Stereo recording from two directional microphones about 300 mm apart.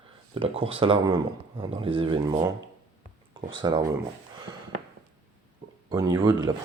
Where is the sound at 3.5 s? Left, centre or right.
Centre.